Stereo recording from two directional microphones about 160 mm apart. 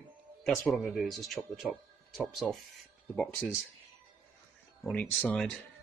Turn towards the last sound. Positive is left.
turn(degrees=5)  # may be behind; listen again after turning